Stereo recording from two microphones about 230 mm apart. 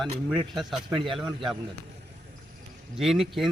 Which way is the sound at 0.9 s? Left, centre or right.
Right.